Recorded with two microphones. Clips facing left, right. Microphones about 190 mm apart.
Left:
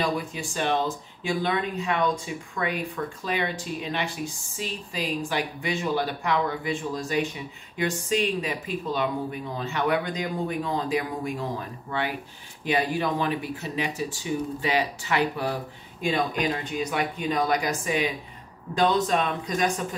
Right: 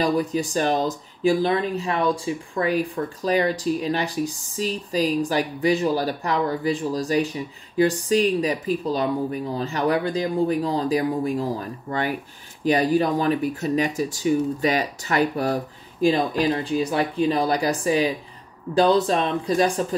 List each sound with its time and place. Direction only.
0.0 s speech: 40° right (ahead or behind)